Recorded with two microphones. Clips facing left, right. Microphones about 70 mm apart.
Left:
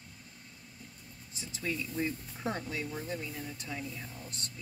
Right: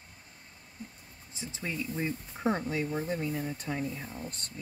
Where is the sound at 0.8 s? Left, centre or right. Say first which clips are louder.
Right 9 dB; right.